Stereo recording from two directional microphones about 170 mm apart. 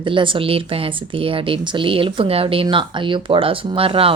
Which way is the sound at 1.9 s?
30° right (ahead or behind).